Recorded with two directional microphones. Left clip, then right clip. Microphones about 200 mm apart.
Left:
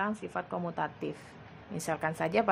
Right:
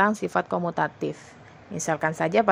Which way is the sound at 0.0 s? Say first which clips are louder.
Right 12 dB; 35° right (ahead or behind).